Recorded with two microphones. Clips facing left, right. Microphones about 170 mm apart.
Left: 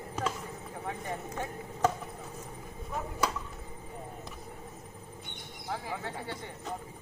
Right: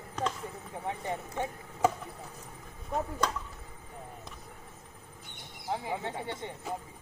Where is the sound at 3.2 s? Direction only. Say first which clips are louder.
Left 3 dB; 5° left (ahead or behind).